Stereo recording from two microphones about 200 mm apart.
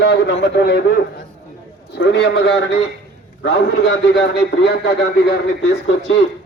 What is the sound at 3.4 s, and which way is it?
A man's voice, 60° left (ahead or behind).